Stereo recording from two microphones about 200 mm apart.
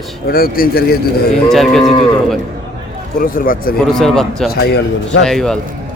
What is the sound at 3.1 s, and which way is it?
Speech, 45° left (ahead or behind).